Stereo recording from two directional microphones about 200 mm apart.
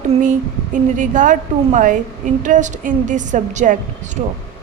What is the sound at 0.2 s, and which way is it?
A woman's voice, 40° right (ahead or behind).